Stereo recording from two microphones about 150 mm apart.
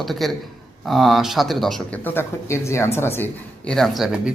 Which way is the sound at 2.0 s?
15° left (ahead or behind).